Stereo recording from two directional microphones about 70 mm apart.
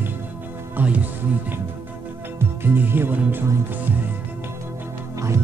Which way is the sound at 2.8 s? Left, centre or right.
Right.